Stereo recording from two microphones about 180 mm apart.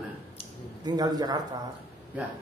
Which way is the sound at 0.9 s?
20° right (ahead or behind).